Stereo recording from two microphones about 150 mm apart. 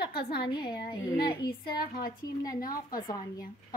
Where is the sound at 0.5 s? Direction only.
30° left (ahead or behind).